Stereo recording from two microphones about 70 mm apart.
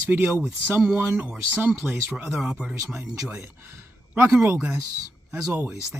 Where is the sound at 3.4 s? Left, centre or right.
Right.